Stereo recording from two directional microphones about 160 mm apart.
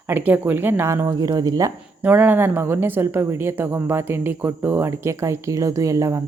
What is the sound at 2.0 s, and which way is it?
A woman's voice, 10° right (ahead or behind).